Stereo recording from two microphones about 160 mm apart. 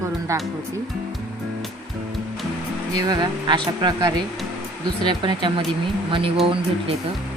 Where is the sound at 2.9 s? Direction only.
25° right (ahead or behind).